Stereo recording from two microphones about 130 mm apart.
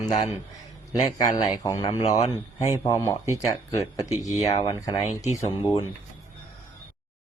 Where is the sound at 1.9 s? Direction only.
55° left (ahead or behind).